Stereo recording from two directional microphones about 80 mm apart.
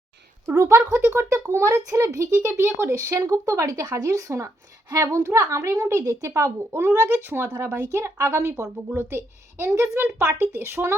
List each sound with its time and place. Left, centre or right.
0.4 s speech: right